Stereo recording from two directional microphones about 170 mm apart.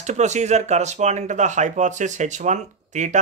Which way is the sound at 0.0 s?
40° right (ahead or behind).